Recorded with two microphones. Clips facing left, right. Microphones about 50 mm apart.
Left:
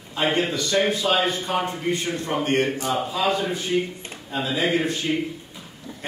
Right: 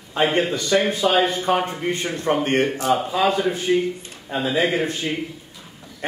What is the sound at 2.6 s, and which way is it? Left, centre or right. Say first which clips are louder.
Speech: right 4 dB; centre.